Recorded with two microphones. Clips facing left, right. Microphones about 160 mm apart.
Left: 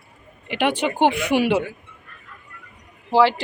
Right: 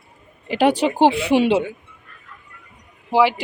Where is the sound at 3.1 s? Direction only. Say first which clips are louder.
Even; 15° right (ahead or behind).